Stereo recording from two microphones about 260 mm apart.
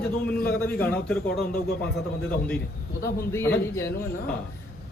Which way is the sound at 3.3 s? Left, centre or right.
Centre.